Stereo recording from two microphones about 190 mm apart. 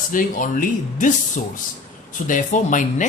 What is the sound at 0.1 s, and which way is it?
Speech, 45° left (ahead or behind).